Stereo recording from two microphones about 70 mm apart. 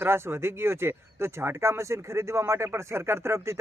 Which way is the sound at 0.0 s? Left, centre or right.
Right.